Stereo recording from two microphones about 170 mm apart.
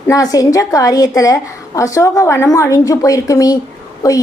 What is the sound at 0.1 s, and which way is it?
A woman's voice, 20° left (ahead or behind).